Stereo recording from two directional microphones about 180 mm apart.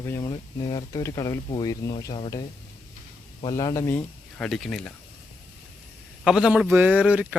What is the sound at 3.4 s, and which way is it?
Speech, 20° left (ahead or behind).